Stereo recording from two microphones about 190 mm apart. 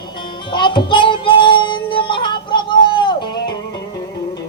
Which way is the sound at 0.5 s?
25° left (ahead or behind).